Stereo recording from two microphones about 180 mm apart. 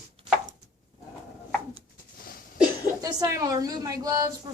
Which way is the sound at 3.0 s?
20° right (ahead or behind).